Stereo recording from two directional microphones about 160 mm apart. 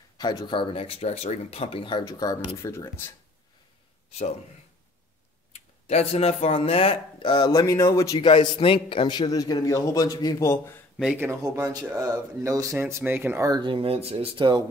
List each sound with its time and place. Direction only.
0.2 s speech: 25° left (ahead or behind)
5.5 s speech: 40° left (ahead or behind); by 8.2 s 20° left (ahead or behind)
8.2 s a man's voice: 30° left (ahead or behind); by 10.8 s 15° left (ahead or behind)
11.0 s speech: 10° right (ahead or behind); by 14.6 s 30° right (ahead or behind)